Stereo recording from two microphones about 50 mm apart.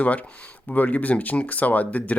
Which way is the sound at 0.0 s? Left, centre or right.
Left.